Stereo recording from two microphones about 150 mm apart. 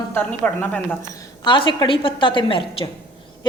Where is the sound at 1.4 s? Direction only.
35° left (ahead or behind).